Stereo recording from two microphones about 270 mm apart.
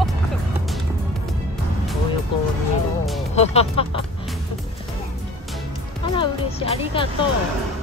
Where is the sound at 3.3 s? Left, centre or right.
Left.